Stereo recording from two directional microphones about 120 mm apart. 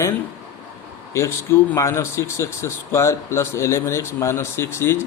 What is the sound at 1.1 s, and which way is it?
Speech, 25° left (ahead or behind).